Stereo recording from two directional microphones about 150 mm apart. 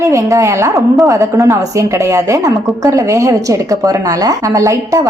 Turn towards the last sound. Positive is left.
turn(degrees=-20)  # may be behind; listen again after turning